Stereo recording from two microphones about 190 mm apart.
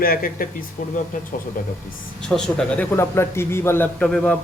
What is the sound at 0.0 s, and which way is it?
Speech, 50° left (ahead or behind).